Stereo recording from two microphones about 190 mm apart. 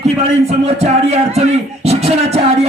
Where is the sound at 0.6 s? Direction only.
35° right (ahead or behind).